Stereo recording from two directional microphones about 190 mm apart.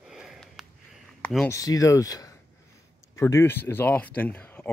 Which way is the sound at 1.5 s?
20° left (ahead or behind).